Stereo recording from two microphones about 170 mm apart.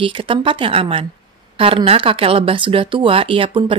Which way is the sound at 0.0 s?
30° right (ahead or behind).